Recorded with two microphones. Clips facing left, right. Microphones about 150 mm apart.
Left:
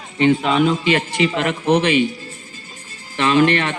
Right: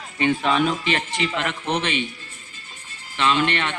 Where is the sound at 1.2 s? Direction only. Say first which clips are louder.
Left 7 dB; 40° left (ahead or behind).